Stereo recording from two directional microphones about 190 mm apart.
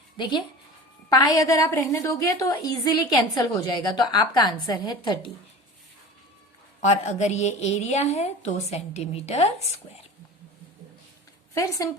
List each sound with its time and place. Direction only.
0.2 s a woman's voice: 25° left (ahead or behind)
6.8 s a woman's voice: 40° left (ahead or behind)
11.5 s a woman's voice: 15° left (ahead or behind)